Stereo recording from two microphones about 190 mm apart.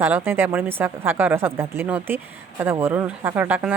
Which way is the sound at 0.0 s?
10° right (ahead or behind).